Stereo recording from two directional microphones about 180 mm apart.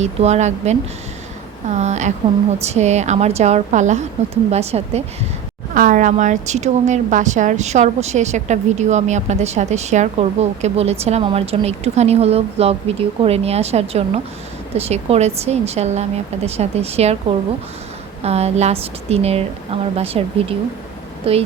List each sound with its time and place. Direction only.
0.0 s a woman's voice: 40° right (ahead or behind)
5.7 s a woman's voice: 45° right (ahead or behind)
18.2 s a woman's voice: 35° right (ahead or behind)